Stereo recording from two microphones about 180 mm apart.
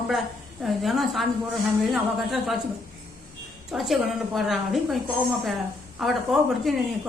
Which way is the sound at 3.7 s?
Centre (ahead or behind).